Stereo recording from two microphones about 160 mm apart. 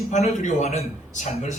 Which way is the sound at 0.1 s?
45° left (ahead or behind).